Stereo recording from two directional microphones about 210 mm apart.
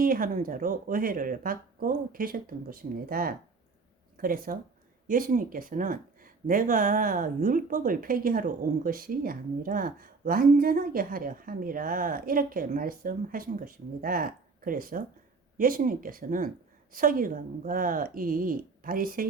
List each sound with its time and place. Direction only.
0.0 s speech: 40° right (ahead or behind)